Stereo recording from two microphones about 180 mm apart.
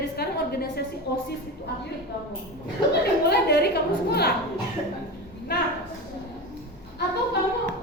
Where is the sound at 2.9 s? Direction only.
65° left (ahead or behind).